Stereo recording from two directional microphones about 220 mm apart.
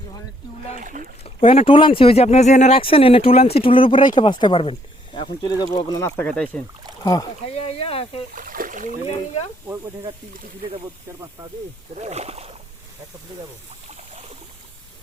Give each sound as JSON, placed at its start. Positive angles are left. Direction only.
{"t": 0.8, "sound": "speech", "side_deg": -35}
{"t": 1.2, "sound": "speech", "side_deg": 25}
{"t": 7.4, "sound": "speech", "side_deg": 25}
{"t": 8.4, "sound": "boat", "side_deg": -40}
{"t": 11.9, "sound": "speech", "side_deg": -30}
{"t": 13.8, "sound": "boat", "side_deg": -30}